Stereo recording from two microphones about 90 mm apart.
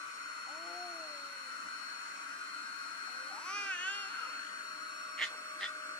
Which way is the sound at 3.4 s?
15° left (ahead or behind).